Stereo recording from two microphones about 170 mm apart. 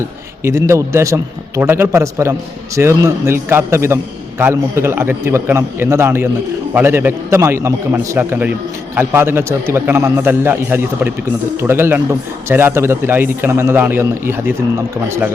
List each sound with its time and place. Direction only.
0.4 s a man's voice: 15° right (ahead or behind)